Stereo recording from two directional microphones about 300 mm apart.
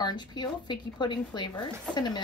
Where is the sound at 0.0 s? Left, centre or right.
Centre.